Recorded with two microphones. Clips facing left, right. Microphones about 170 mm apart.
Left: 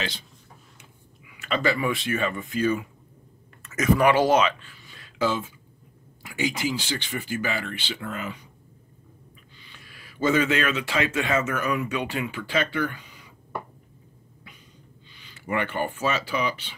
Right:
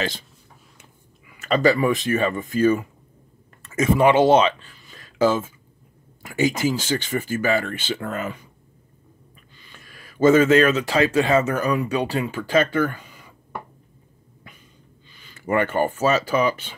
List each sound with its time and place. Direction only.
1.3 s speech: 40° right (ahead or behind)
3.6 s speech: 25° right (ahead or behind)
4.9 s a sound: 40° right (ahead or behind)
6.2 s speech: 45° right (ahead or behind)
9.6 s speech: 45° right (ahead or behind)
15.0 s speech: 45° right (ahead or behind)